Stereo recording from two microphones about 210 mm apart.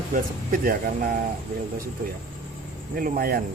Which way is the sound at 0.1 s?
40° right (ahead or behind).